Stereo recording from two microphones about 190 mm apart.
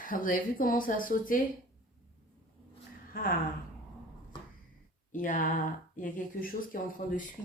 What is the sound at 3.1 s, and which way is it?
Speech, 50° left (ahead or behind).